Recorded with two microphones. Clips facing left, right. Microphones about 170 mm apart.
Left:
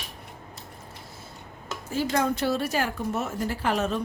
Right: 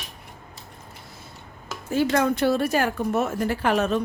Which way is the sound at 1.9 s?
65° right (ahead or behind).